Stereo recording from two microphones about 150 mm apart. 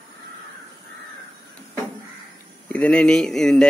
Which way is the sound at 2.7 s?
10° left (ahead or behind).